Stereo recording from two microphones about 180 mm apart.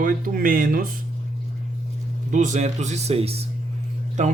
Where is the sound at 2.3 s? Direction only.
45° right (ahead or behind).